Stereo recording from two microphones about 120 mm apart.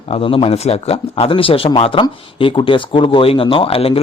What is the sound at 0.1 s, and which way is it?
Speech, 50° left (ahead or behind).